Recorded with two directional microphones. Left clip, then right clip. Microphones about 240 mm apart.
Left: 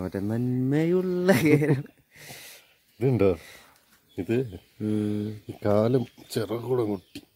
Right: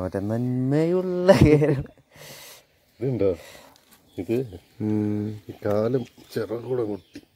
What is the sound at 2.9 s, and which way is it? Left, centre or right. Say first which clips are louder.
Speech: left 1 dB; left.